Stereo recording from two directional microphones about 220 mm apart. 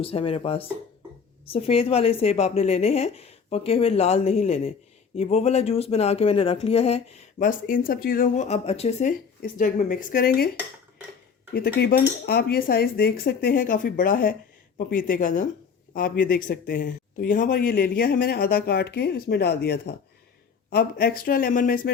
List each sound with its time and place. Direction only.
0.0 s a man's voice: 25° left (ahead or behind); by 10.5 s 40° left (ahead or behind)
11.5 s a man's voice: 45° left (ahead or behind)